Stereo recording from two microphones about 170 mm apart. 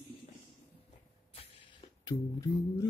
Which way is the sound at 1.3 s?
35° left (ahead or behind).